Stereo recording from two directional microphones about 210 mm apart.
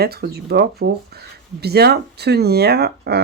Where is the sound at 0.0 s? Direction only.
50° right (ahead or behind).